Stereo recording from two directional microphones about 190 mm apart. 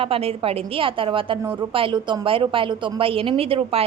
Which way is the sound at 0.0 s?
30° right (ahead or behind).